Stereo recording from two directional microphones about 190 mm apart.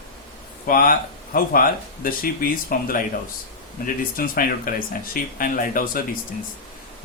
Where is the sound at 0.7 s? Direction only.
50° left (ahead or behind).